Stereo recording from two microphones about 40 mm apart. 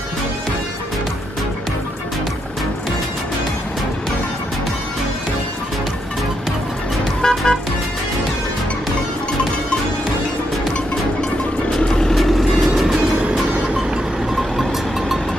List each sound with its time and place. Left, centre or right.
7.2 s music: centre
11.8 s vehicle: centre
12.2 s vehicle: centre
14.3 s vehicle: centre